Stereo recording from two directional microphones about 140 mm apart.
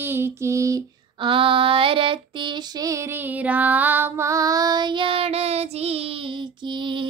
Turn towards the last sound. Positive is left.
turn(degrees=-35)  # may be behind; listen again after turning